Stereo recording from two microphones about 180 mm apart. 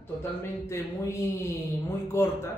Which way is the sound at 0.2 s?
15° left (ahead or behind).